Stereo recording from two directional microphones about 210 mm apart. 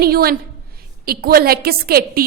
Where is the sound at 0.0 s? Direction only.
45° right (ahead or behind).